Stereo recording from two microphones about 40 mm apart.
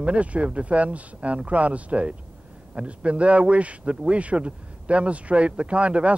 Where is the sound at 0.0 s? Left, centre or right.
Right.